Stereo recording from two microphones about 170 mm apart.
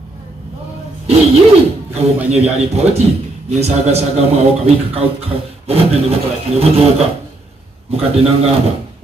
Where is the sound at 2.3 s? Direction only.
40° right (ahead or behind).